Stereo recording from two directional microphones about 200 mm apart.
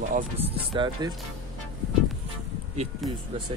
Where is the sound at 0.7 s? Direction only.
25° right (ahead or behind).